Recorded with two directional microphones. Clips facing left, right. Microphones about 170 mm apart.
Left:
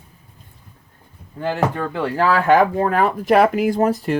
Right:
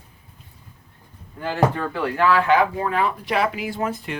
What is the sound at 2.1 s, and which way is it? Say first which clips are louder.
Speech: left 3 dB; 40° left (ahead or behind).